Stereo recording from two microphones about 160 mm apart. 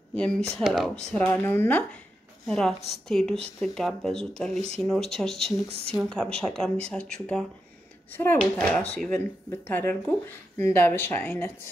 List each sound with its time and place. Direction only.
0.1 s a woman's voice: 5° left (ahead or behind)
4.6 s speech: 40° right (ahead or behind)
4.8 s speech: centre (ahead or behind)